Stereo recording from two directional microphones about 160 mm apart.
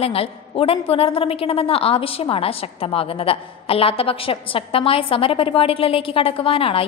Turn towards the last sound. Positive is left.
turn(degrees=35)  # may be behind; listen again after turning